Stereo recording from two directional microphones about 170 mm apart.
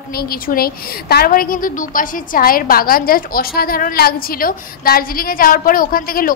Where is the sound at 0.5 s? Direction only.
65° left (ahead or behind).